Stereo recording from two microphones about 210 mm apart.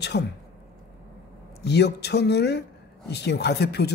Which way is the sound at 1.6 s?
50° left (ahead or behind).